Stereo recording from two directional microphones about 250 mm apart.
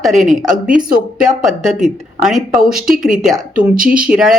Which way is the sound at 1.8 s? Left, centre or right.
Centre.